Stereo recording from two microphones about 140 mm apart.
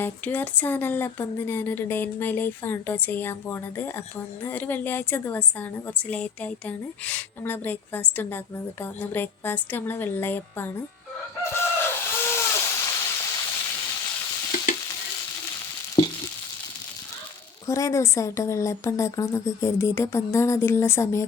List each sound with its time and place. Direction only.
0.0 s speech: 15° left (ahead or behind)
11.4 s chicken: 15° left (ahead or behind)
17.7 s a woman's voice: 20° left (ahead or behind)